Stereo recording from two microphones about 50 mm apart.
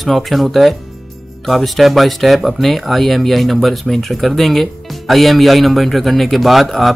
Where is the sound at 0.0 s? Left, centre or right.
Centre.